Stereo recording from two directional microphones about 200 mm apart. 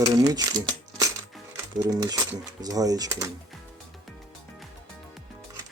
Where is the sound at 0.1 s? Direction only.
20° right (ahead or behind).